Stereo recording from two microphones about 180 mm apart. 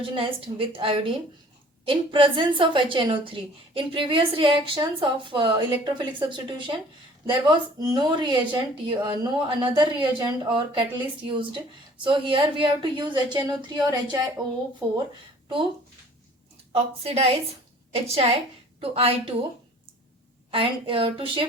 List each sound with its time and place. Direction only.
0.0 s a woman's voice: 30° right (ahead or behind)
16.7 s a woman's voice: 35° right (ahead or behind)
20.5 s a woman's voice: 30° right (ahead or behind)